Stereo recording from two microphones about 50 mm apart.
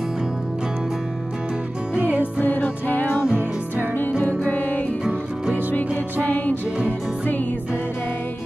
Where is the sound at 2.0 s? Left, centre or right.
Right.